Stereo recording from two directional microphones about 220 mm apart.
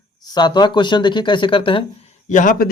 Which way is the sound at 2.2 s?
35° left (ahead or behind).